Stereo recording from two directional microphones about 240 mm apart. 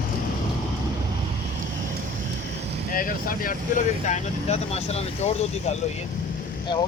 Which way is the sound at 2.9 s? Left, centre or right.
Left.